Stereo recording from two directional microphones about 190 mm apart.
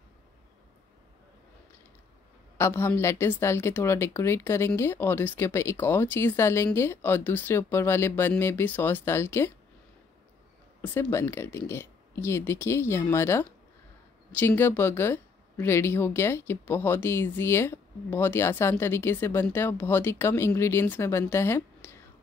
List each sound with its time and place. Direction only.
2.5 s speech: 15° left (ahead or behind)
10.8 s speech: 10° left (ahead or behind)